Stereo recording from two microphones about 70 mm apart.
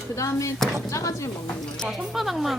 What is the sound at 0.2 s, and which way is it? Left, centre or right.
Speech, left.